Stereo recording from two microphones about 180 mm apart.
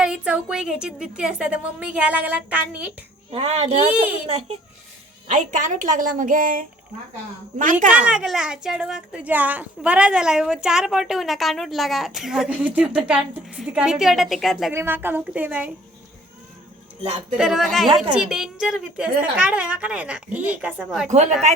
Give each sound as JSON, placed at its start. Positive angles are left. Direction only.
{"t": 0.0, "sound": "speech", "side_deg": -5}
{"t": 3.3, "sound": "a woman's voice", "side_deg": -35}
{"t": 7.9, "sound": "speech", "side_deg": -5}
{"t": 14.7, "sound": "a woman's voice", "side_deg": -10}
{"t": 17.3, "sound": "speech", "side_deg": 0}